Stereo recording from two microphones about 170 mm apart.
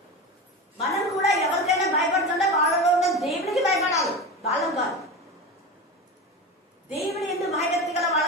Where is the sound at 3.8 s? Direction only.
20° left (ahead or behind).